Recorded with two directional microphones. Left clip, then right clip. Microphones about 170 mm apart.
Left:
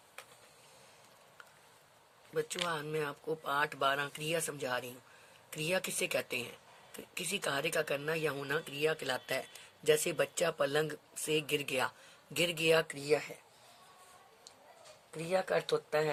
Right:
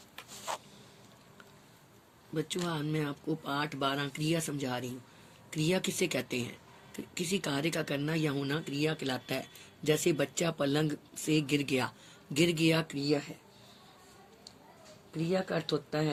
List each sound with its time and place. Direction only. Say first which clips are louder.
2.3 s speech: even; 35° left (ahead or behind)
15.3 s speech: left 1 dB; 35° left (ahead or behind)